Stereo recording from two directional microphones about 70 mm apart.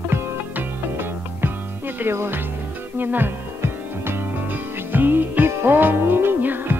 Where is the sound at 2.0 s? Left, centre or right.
Right.